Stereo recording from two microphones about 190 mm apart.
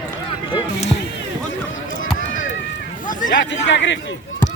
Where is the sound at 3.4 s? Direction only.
70° left (ahead or behind).